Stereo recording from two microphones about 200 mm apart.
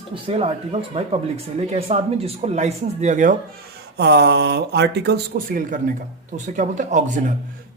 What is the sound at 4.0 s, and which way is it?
Speech, 55° right (ahead or behind).